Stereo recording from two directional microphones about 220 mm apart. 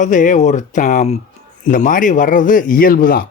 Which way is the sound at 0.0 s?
35° left (ahead or behind).